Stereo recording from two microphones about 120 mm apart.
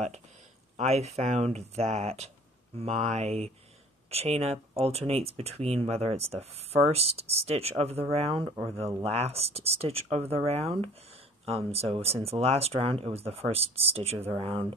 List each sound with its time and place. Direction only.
0.7 s speech: 60° right (ahead or behind)